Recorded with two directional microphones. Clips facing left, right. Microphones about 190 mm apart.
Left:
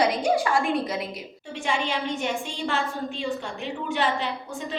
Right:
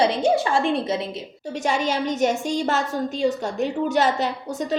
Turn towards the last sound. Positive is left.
turn(degrees=-40)  # may be behind; listen again after turning